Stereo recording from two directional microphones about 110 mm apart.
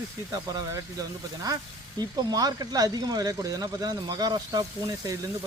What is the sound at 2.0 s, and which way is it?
Speech, 35° right (ahead or behind).